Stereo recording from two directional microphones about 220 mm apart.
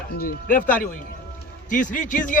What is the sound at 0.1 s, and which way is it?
Speech, 40° left (ahead or behind).